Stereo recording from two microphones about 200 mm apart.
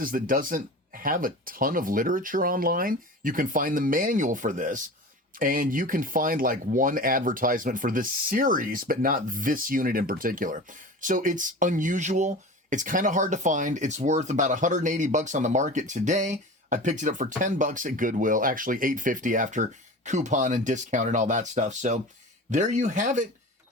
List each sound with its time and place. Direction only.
0.0 s speech: 45° right (ahead or behind)